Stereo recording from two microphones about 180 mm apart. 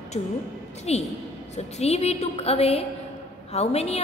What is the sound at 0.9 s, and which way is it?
A woman's voice, 35° left (ahead or behind).